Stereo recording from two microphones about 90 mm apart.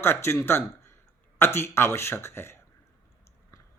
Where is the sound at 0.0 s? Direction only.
25° left (ahead or behind).